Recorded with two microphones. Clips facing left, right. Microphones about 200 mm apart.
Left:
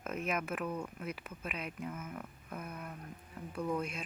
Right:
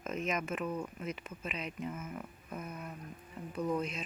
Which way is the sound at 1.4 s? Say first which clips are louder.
Right 1 dB; 5° left (ahead or behind).